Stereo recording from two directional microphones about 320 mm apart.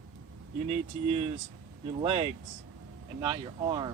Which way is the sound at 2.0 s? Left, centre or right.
Centre.